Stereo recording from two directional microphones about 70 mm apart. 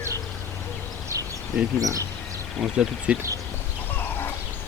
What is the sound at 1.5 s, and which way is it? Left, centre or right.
Speech, centre.